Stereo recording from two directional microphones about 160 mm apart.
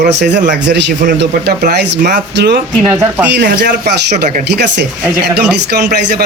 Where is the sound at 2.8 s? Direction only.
10° right (ahead or behind).